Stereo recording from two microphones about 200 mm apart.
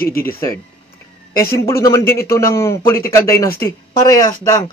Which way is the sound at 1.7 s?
15° left (ahead or behind).